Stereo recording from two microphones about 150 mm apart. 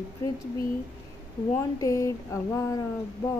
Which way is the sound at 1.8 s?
20° left (ahead or behind).